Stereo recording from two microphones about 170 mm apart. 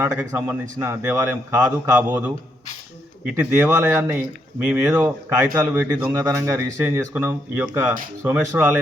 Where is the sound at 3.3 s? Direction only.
10° right (ahead or behind).